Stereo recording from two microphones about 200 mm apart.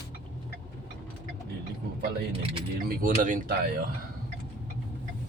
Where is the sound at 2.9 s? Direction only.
40° right (ahead or behind).